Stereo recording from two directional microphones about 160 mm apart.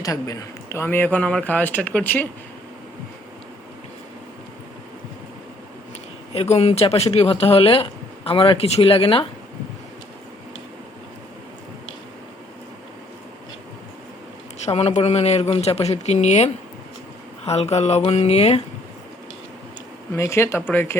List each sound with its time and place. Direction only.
0.0 s speech: 20° left (ahead or behind)
6.3 s speech: 40° left (ahead or behind)
14.6 s speech: 40° left (ahead or behind)
20.1 s speech: 15° left (ahead or behind)